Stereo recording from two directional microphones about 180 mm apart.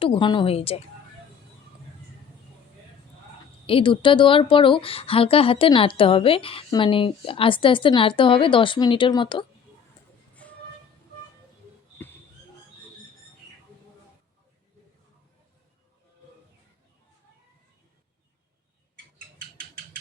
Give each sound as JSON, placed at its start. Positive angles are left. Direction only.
{"t": 0.0, "sound": "a woman's voice", "side_deg": 25}
{"t": 3.7, "sound": "a woman's voice", "side_deg": 30}
{"t": 10.4, "sound": "train", "side_deg": 5}